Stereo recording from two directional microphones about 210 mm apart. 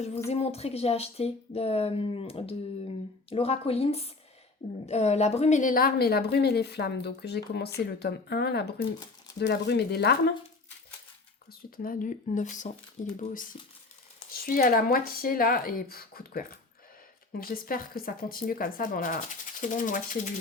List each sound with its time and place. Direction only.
0.3 s a woman's voice: 30° left (ahead or behind); by 10.3 s 50° left (ahead or behind)
11.8 s a woman's voice: 40° left (ahead or behind)